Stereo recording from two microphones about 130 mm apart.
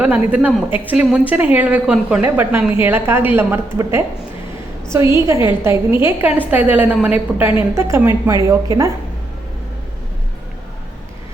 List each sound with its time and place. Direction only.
0.0 s a woman's voice: 10° right (ahead or behind)
4.9 s a woman's voice: 20° right (ahead or behind)